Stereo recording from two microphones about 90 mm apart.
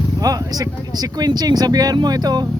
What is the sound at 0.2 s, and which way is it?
Speech, 40° right (ahead or behind).